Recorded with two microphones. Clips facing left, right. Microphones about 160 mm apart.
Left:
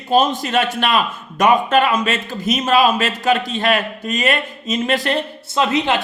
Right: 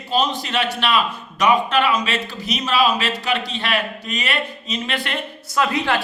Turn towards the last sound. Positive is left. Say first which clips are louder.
# left 3 dB
turn(degrees=20)  # may be behind; listen again after turning